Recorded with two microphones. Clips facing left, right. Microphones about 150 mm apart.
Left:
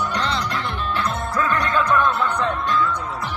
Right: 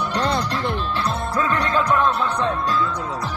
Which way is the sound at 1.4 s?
30° right (ahead or behind).